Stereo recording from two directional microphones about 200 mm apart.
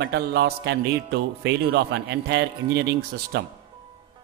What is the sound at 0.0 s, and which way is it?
Speech, 60° right (ahead or behind).